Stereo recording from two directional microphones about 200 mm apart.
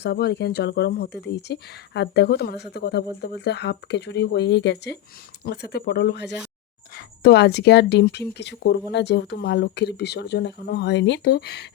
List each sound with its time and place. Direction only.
0.0 s speech: 55° left (ahead or behind)